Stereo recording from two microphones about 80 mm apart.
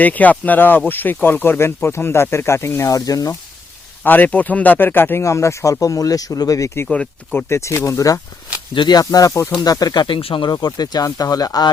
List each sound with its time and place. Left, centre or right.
0.0 s speech: centre; by 3.3 s left
4.0 s speech: left
5.2 s speech: left
6.9 s speech: centre
7.3 s speech: left
8.7 s speech: left
10.7 s speech: left